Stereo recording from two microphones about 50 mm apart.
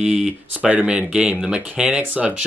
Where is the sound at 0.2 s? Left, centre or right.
Right.